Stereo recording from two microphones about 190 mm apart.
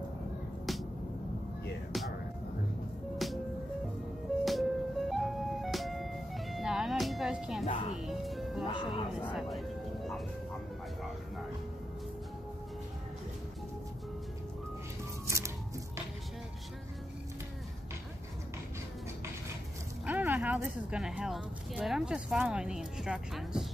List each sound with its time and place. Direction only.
1.9 s music: centre (ahead or behind)
3.2 s music: centre (ahead or behind)
4.5 s music: centre (ahead or behind)
8.6 s speech: 25° left (ahead or behind)
9.3 s music: centre (ahead or behind)
15.2 s music: 15° right (ahead or behind)
20.1 s speech: 10° right (ahead or behind)